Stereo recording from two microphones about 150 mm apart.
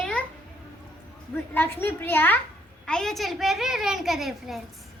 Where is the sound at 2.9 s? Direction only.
5° left (ahead or behind).